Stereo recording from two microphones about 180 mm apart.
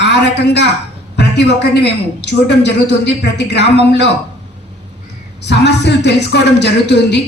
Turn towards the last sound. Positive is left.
turn(degrees=70)  # may be behind; listen again after turning